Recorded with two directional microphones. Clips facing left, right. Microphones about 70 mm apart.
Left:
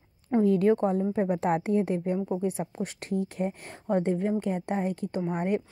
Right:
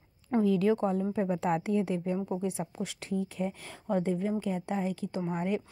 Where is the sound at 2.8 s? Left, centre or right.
Left.